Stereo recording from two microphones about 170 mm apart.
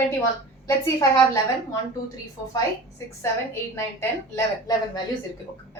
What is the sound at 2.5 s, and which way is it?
A woman's voice, 15° left (ahead or behind).